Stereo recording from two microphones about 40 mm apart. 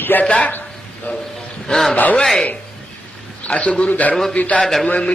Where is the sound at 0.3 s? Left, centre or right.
Left.